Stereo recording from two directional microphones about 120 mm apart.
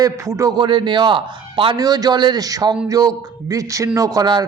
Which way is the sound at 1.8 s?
35° right (ahead or behind).